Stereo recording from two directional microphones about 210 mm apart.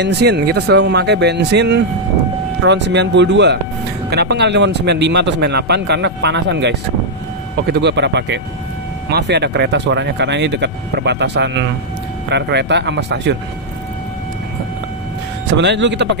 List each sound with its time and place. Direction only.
0.0 s speech: 50° right (ahead or behind)
15.5 s speech: 55° right (ahead or behind)